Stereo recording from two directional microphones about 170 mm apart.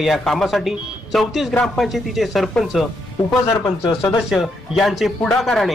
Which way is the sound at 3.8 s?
20° left (ahead or behind).